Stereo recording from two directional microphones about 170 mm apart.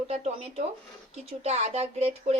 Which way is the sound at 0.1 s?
35° right (ahead or behind).